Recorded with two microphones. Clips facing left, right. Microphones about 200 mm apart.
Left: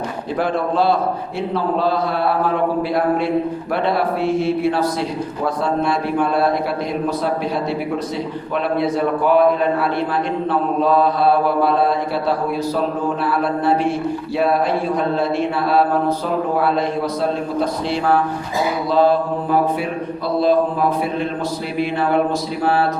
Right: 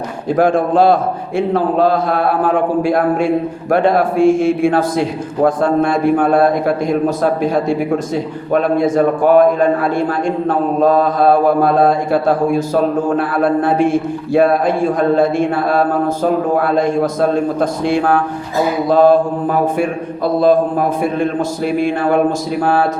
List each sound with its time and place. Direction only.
0.3 s mantra: 45° right (ahead or behind)